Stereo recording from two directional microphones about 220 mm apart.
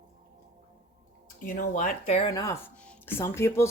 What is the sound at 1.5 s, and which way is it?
Speech, 35° left (ahead or behind).